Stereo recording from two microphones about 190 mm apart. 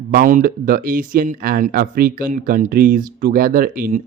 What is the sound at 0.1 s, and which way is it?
Speech, 45° right (ahead or behind).